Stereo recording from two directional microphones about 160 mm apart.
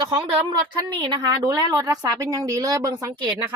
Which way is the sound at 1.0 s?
25° right (ahead or behind).